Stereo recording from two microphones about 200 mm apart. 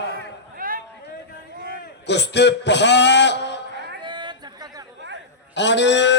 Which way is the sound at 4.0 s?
20° right (ahead or behind).